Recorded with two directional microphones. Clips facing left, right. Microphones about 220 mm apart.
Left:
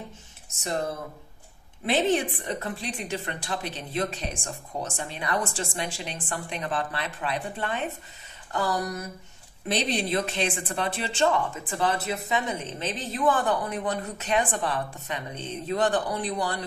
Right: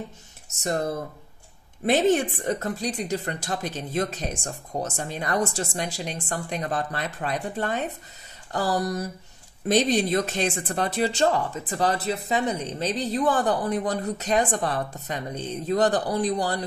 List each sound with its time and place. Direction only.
1.9 s speech: 45° right (ahead or behind)